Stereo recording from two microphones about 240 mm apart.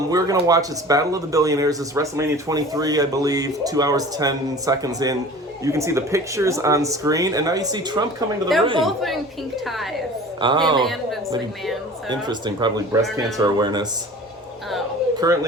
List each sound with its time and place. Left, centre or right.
0.1 s speech: centre
8.8 s a woman's voice: centre
10.4 s a man's voice: centre
10.8 s a woman's voice: centre
12.0 s speech: centre
15.1 s a sound: centre